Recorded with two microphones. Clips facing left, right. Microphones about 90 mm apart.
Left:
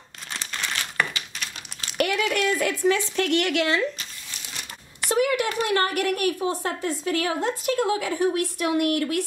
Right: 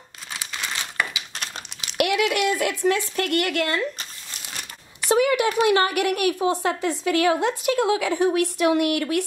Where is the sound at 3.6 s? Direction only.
50° right (ahead or behind).